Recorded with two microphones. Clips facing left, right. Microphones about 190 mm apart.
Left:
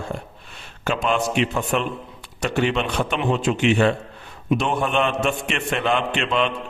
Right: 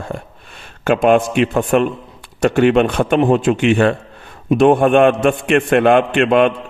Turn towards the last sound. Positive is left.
turn(degrees=-55)  # may be behind; listen again after turning